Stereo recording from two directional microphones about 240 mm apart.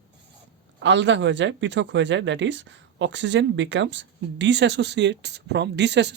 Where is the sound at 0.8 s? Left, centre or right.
Right.